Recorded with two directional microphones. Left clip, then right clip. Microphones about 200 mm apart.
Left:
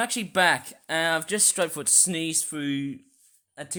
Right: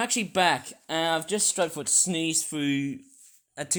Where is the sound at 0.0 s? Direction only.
10° left (ahead or behind).